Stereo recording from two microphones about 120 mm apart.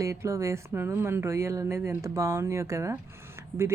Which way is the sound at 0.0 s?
25° right (ahead or behind).